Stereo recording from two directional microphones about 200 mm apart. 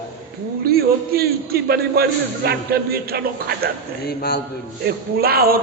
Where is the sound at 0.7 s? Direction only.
50° right (ahead or behind).